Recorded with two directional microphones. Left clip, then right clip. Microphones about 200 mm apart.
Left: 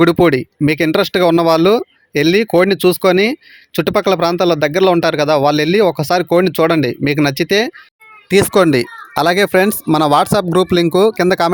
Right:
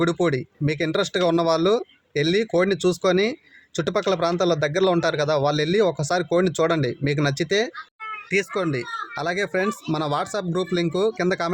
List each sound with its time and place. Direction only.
0.0 s speech: 40° left (ahead or behind)
8.3 s speech: 45° left (ahead or behind)